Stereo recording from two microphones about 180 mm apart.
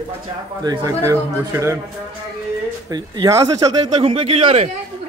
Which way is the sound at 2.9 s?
20° right (ahead or behind).